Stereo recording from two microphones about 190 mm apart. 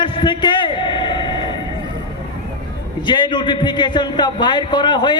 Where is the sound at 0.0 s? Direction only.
25° left (ahead or behind).